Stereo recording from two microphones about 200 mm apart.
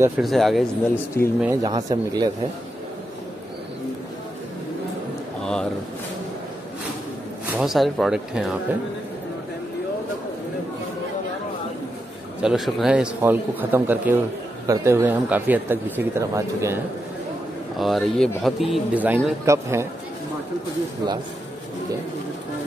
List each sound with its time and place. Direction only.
0.2 s speech: centre (ahead or behind)
1.4 s speech: 15° right (ahead or behind)
5.4 s a sound: 5° left (ahead or behind)
7.5 s speech: centre (ahead or behind)
12.4 s speech: centre (ahead or behind)
17.7 s speech: centre (ahead or behind)